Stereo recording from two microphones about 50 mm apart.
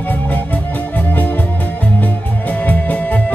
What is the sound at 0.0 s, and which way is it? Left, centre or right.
Music, left.